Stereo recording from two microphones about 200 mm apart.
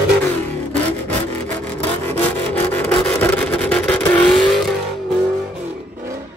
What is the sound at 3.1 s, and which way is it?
Vehicle, 10° left (ahead or behind).